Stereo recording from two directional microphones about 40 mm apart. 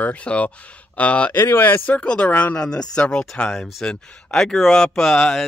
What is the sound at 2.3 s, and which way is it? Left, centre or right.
Speech, left.